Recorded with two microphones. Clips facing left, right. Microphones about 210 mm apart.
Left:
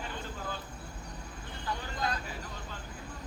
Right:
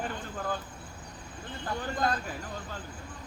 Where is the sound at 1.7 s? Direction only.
50° right (ahead or behind).